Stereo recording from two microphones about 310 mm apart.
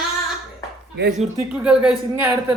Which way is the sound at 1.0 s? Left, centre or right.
Right.